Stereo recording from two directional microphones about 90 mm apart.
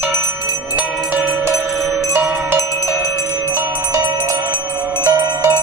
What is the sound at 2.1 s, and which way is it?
Wind chime, 30° right (ahead or behind).